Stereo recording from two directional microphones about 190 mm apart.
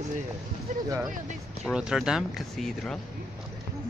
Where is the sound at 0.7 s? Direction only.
40° right (ahead or behind).